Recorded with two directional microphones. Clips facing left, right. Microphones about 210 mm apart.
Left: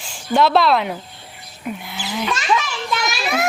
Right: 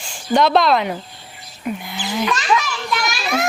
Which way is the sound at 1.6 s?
Centre (ahead or behind).